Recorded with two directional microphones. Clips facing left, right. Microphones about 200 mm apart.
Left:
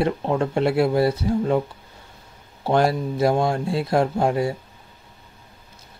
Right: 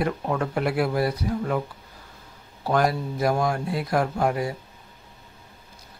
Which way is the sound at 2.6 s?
30° left (ahead or behind).